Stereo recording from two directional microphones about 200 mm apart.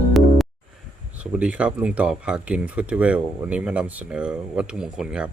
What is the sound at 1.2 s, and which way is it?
Speech, 5° right (ahead or behind).